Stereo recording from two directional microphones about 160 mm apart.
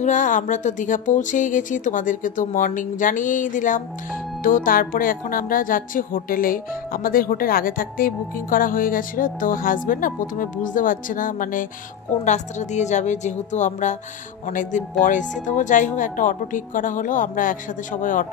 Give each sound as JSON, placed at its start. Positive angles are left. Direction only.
{"t": 0.0, "sound": "speech", "side_deg": 50}